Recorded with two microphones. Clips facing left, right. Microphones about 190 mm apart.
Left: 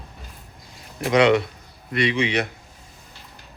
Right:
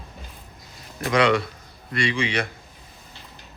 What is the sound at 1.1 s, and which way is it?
A man's voice, 20° left (ahead or behind).